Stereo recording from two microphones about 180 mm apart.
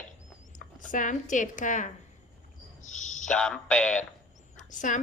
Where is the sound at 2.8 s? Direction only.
45° left (ahead or behind).